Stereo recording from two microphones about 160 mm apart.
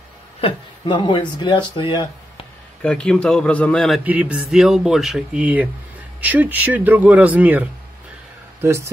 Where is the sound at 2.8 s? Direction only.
5° left (ahead or behind).